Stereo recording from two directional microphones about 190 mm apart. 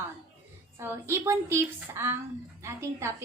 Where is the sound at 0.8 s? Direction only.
15° right (ahead or behind).